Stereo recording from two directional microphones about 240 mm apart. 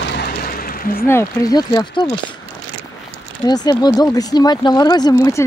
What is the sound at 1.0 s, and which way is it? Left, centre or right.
Speech, centre.